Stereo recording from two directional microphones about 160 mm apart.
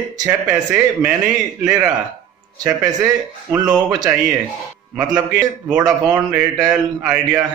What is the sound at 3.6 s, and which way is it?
Speech, 5° right (ahead or behind).